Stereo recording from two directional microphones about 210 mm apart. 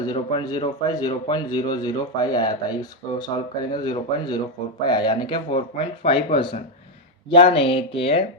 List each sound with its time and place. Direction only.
0.0 s speech: 20° left (ahead or behind)